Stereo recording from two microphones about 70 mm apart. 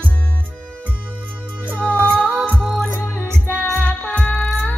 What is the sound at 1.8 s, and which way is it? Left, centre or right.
Music, right.